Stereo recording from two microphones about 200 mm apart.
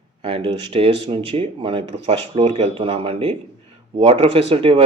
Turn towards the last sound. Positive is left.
turn(degrees=-25)  # may be behind; listen again after turning